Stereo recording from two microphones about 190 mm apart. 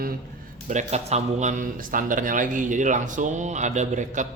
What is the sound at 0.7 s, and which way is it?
A man's voice, 35° right (ahead or behind).